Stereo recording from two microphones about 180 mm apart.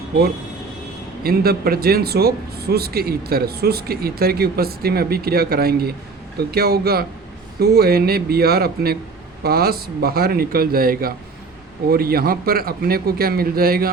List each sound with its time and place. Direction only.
1.2 s speech: 55° right (ahead or behind)